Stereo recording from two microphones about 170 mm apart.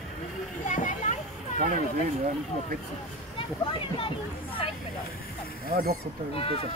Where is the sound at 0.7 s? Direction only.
50° left (ahead or behind).